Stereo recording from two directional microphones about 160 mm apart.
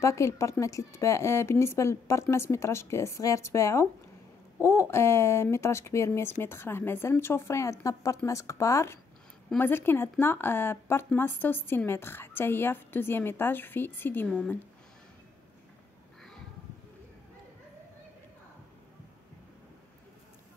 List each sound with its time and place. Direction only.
0.0 s speech: 20° left (ahead or behind)